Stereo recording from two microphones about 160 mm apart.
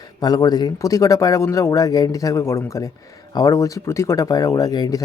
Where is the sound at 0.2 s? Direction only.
25° left (ahead or behind).